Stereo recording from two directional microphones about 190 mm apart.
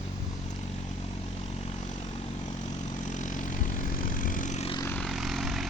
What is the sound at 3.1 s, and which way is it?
Vehicle, 40° left (ahead or behind).